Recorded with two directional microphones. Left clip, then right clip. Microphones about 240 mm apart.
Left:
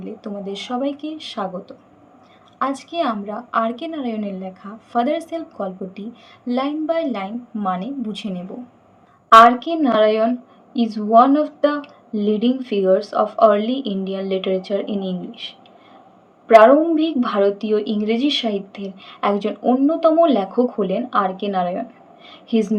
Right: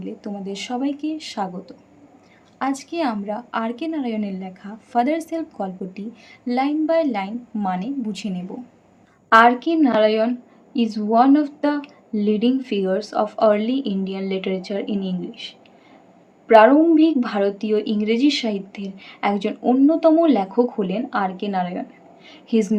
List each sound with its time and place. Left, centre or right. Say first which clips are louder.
0.0 s a woman's voice: left 2 dB; right
9.3 s speech: left 4 dB; centre
16.6 s speech: left 1 dB; centre